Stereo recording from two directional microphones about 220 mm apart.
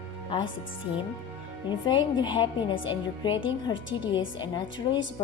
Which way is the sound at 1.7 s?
20° left (ahead or behind).